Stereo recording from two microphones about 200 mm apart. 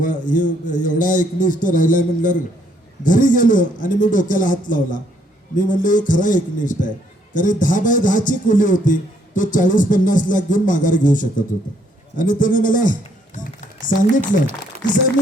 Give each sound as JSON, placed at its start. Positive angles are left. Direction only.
{"t": 0.0, "sound": "a man's voice", "side_deg": 40}